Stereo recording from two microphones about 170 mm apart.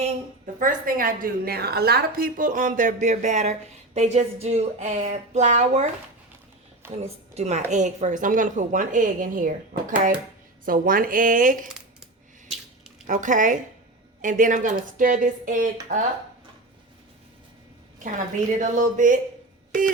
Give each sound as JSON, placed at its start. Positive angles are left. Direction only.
{"t": 0.6, "sound": "a woman's voice", "side_deg": -55}
{"t": 6.9, "sound": "a woman's voice", "side_deg": -40}
{"t": 13.1, "sound": "a woman's voice", "side_deg": -45}
{"t": 18.6, "sound": "a woman's voice", "side_deg": -50}